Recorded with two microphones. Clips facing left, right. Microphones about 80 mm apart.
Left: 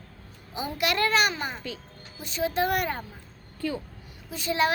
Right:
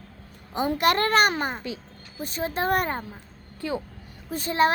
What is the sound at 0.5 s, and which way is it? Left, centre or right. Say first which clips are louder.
A child's voice: right 6 dB; right.